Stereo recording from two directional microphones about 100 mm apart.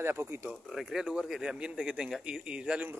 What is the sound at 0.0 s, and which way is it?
Speech, 25° right (ahead or behind).